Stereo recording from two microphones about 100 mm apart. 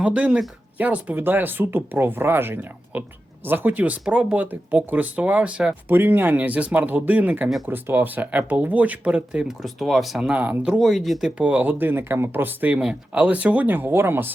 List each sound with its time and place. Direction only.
0.0 s speech: 10° right (ahead or behind)
10.8 s speech: centre (ahead or behind)
11.3 s speech: 15° right (ahead or behind)